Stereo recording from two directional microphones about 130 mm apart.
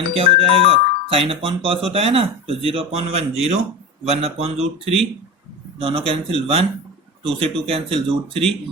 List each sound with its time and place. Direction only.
0.1 s speech: 45° right (ahead or behind)